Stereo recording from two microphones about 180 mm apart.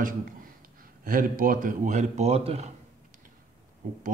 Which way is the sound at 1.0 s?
50° right (ahead or behind).